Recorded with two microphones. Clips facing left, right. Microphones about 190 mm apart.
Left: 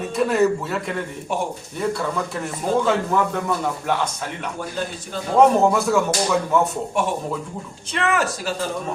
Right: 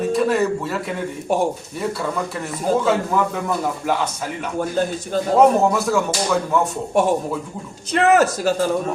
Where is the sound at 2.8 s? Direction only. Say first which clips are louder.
Right 1 dB; 5° right (ahead or behind).